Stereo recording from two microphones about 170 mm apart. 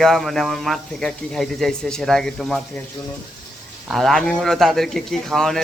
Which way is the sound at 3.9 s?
Centre (ahead or behind).